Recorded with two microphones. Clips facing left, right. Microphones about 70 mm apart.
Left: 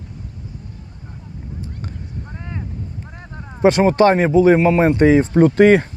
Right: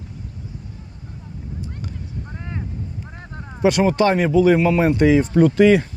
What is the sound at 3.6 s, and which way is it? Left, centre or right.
Speech, left.